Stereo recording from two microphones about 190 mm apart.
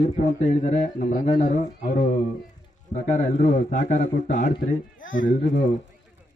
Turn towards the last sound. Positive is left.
turn(degrees=45)  # may be behind; listen again after turning